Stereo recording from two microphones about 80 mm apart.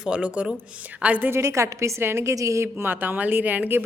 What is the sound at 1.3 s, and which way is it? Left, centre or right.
A woman's voice, right.